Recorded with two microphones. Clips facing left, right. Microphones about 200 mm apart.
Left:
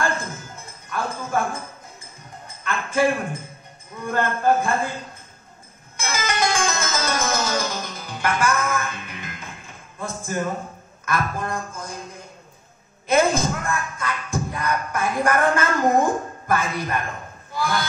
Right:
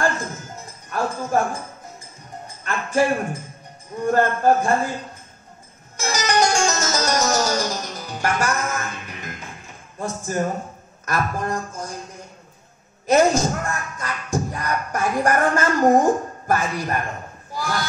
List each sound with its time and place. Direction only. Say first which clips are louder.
0.8 s speech: right 3 dB; 45° right (ahead or behind)
2.6 s a man's voice: even; 45° right (ahead or behind)
5.9 s music: right 4 dB; 40° right (ahead or behind)
9.9 s speech: right 3 dB; 45° right (ahead or behind)
13.0 s speech: right 3 dB; 45° right (ahead or behind)
17.6 s a sound: left 2 dB; 40° right (ahead or behind)